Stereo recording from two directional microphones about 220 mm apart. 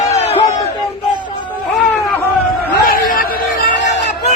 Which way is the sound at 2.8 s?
40° left (ahead or behind).